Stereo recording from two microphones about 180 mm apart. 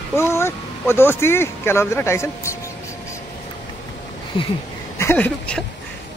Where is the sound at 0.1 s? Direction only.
15° left (ahead or behind).